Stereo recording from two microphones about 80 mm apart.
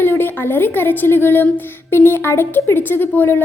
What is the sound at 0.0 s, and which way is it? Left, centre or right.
A woman's voice, left.